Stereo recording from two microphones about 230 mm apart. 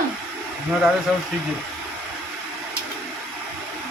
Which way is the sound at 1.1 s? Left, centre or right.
Centre.